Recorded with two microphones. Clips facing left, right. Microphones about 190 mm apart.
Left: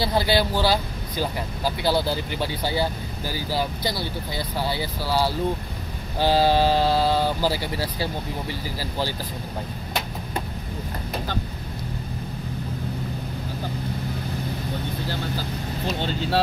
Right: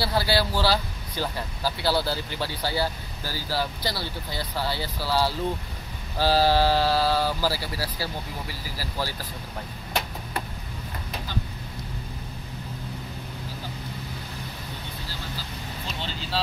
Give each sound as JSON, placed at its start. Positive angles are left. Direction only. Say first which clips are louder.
{"t": 0.0, "sound": "speech", "louder": "left 3 dB", "side_deg": 20}
{"t": 15.9, "sound": "speech", "louder": "left 9 dB", "side_deg": 50}